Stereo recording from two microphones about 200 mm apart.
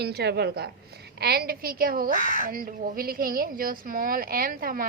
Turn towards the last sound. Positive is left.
turn(degrees=-45)  # may be behind; listen again after turning